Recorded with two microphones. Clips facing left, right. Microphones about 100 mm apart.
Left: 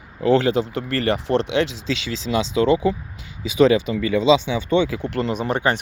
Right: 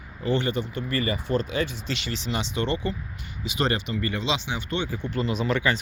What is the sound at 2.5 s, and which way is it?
Speech, 90° left.